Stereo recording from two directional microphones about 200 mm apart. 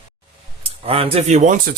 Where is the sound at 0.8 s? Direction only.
30° right (ahead or behind).